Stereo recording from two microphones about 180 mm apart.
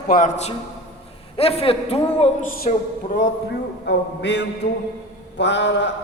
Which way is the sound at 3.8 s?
75° left (ahead or behind).